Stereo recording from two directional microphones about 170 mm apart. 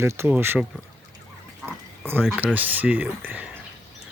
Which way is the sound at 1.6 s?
10° right (ahead or behind).